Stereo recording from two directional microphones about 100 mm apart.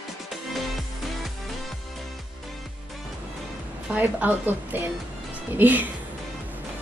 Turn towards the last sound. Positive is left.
turn(degrees=-15)  # may be behind; listen again after turning